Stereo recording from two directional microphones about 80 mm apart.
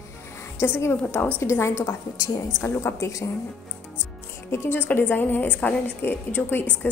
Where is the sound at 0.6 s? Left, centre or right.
Left.